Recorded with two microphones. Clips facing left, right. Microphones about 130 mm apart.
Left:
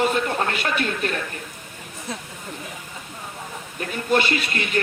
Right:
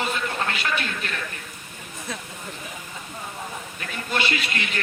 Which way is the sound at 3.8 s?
45° left (ahead or behind).